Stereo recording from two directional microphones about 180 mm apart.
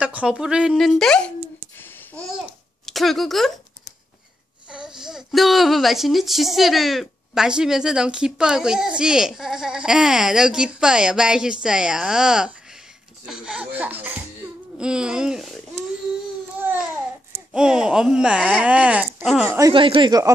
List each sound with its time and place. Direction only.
0.0 s speech: 5° right (ahead or behind)
2.8 s speech: centre (ahead or behind)
4.6 s speech: 5° right (ahead or behind)
16.6 s speech: 10° right (ahead or behind)
19.6 s speech: 30° right (ahead or behind)